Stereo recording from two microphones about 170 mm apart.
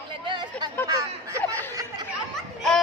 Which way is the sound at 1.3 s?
20° right (ahead or behind).